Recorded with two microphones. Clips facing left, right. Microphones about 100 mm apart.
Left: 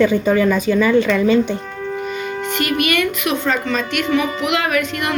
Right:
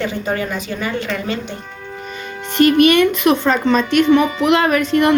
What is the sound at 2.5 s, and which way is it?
A woman's voice, 35° right (ahead or behind).